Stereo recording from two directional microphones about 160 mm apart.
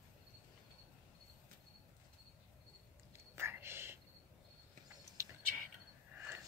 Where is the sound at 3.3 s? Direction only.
15° right (ahead or behind).